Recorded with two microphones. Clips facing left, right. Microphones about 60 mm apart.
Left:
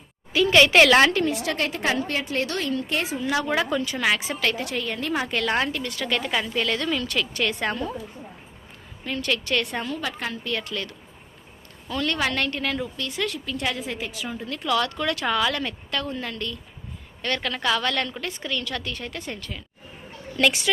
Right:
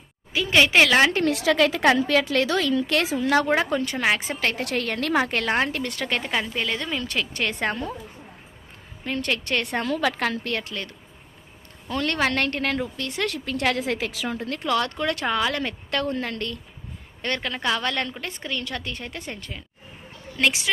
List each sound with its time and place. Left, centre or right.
0.3 s a woman's voice: centre
1.2 s a woman's voice: right
3.3 s a woman's voice: right
4.5 s a woman's voice: right
5.4 s a woman's voice: right
6.3 s a woman's voice: right
9.0 s a woman's voice: right
9.8 s a woman's voice: right
10.6 s a woman's voice: right
11.9 s speech: right
17.2 s a woman's voice: right